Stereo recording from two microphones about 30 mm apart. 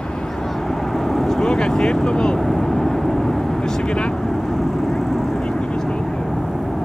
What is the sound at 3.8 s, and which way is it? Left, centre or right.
Vehicle, left.